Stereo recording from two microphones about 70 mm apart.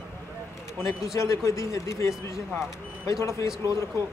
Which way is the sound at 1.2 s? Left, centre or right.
Left.